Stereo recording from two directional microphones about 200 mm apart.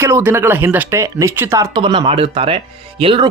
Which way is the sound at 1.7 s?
25° right (ahead or behind).